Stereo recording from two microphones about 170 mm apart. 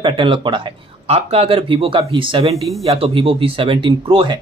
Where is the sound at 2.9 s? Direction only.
35° right (ahead or behind).